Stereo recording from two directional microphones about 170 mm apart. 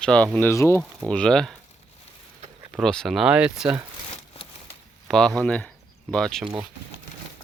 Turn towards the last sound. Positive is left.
turn(degrees=5)  # may be behind; listen again after turning